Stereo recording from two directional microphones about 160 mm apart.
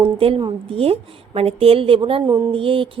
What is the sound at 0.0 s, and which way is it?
Speech, 35° right (ahead or behind).